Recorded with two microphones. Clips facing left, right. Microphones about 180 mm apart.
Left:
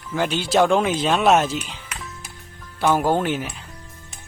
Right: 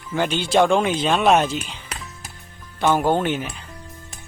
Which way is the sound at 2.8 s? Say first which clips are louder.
Even; 5° left (ahead or behind).